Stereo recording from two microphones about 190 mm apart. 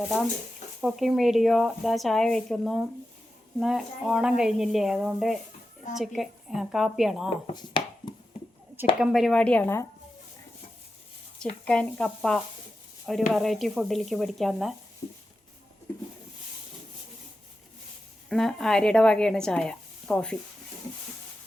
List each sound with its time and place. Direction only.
0.8 s speech: centre (ahead or behind)
7.4 s chopping: 25° left (ahead or behind)
8.0 s a sound: 20° left (ahead or behind)
9.0 s speech: centre (ahead or behind)
11.6 s speech: 5° left (ahead or behind)
18.3 s speech: centre (ahead or behind)